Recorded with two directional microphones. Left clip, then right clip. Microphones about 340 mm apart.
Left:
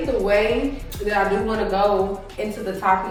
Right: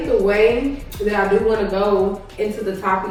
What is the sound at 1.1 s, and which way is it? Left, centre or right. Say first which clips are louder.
Speech: right 4 dB; centre.